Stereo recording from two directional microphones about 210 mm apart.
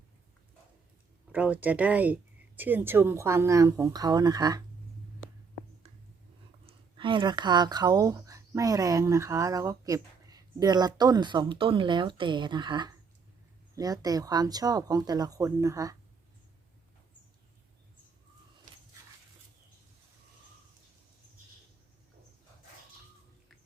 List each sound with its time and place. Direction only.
1.3 s speech: 10° right (ahead or behind)
6.7 s speech: 25° right (ahead or behind)